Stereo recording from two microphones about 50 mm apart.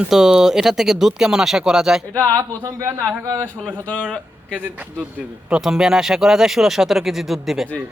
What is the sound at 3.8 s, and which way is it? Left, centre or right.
Speech, left.